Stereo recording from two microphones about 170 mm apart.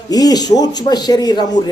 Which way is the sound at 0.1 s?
20° left (ahead or behind).